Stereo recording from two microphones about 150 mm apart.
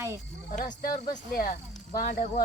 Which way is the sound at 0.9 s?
60° left (ahead or behind).